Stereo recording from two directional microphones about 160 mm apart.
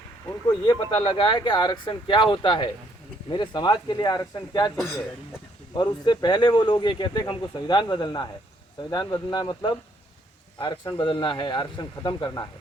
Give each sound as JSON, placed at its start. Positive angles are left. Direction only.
{"t": 0.3, "sound": "speech", "side_deg": 25}
{"t": 5.7, "sound": "speech", "side_deg": 30}